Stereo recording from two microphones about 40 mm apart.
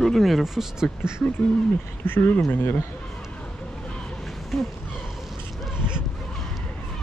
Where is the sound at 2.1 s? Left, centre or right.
Left.